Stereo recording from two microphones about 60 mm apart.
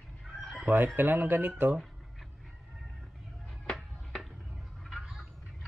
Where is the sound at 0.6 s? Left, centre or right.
Right.